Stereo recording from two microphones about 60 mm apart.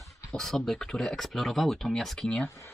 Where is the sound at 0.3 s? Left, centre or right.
Centre.